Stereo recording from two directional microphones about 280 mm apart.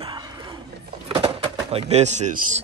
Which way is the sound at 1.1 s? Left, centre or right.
Centre.